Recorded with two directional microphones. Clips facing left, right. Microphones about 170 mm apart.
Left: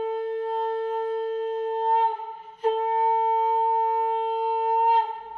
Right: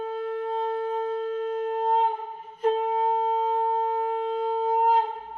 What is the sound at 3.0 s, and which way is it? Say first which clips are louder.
Shofar: left 2 dB; 15° left (ahead or behind).